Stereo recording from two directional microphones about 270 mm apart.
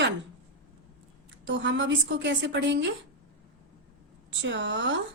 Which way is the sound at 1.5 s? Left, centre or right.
Right.